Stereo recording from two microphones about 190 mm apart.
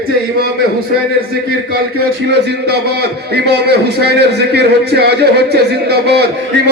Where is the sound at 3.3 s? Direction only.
60° right (ahead or behind).